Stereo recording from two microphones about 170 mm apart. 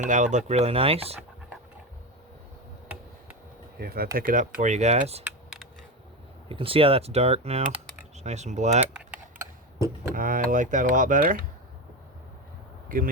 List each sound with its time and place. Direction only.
0.0 s speech: 45° right (ahead or behind)
3.8 s speech: 60° right (ahead or behind); by 5.2 s 40° right (ahead or behind)
6.5 s speech: 35° right (ahead or behind)
10.2 s speech: 55° right (ahead or behind)